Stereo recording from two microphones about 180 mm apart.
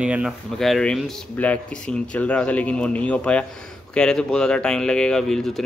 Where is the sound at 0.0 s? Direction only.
5° right (ahead or behind).